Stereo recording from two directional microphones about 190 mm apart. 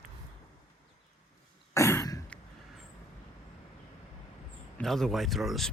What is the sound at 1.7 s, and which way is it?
Throat clearing, 15° left (ahead or behind).